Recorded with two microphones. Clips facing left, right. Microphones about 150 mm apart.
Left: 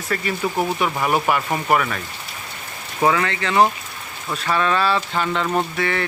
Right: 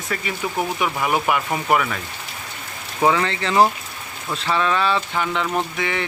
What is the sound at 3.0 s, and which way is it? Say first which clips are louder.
Speech: even; 5° right (ahead or behind).